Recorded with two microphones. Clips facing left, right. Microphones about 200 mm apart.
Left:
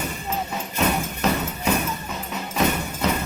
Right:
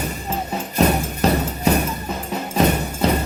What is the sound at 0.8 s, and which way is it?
Music, 35° right (ahead or behind).